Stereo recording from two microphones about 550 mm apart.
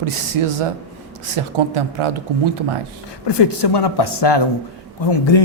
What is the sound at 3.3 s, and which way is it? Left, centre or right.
Speech, left.